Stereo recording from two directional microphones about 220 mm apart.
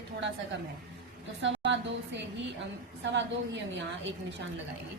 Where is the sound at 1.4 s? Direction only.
55° right (ahead or behind).